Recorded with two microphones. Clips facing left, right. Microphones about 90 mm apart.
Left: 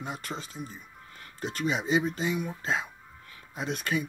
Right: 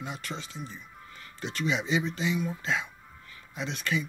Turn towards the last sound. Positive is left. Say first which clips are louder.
# left 1 dB
turn(degrees=45)  # may be behind; listen again after turning